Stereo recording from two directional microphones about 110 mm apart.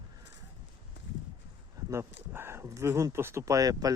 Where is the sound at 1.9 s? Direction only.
20° right (ahead or behind).